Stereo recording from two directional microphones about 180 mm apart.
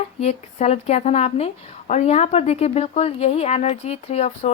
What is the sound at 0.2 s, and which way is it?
Speech, 35° left (ahead or behind).